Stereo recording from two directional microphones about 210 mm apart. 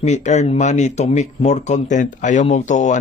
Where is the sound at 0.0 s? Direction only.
35° left (ahead or behind).